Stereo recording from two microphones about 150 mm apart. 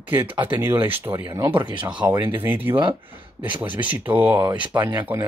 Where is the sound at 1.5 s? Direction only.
30° right (ahead or behind).